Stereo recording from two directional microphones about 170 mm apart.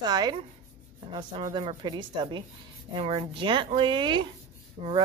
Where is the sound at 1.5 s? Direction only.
30° right (ahead or behind).